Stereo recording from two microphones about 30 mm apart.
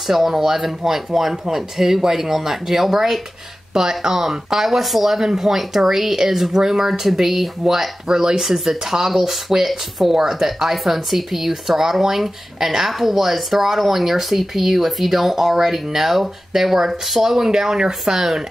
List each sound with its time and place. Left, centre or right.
0.0 s speech: centre
8.1 s speech: right
8.4 s speech: centre